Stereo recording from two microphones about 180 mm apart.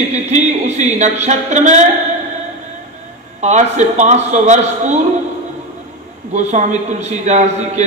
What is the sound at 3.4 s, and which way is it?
A man's voice, 40° right (ahead or behind).